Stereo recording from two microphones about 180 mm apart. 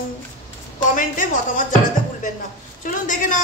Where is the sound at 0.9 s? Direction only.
45° left (ahead or behind).